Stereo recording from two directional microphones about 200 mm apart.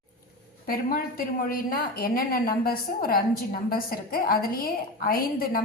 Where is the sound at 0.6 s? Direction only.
45° left (ahead or behind).